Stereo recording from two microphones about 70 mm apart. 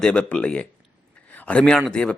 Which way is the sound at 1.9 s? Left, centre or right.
Centre.